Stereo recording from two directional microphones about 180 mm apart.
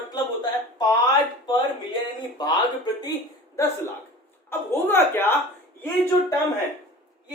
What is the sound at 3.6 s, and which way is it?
A man's voice, 15° left (ahead or behind).